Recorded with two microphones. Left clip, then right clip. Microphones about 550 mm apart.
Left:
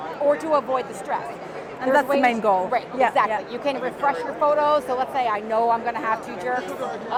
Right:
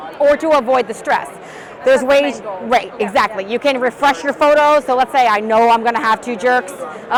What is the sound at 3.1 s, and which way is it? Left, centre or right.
Speech, right.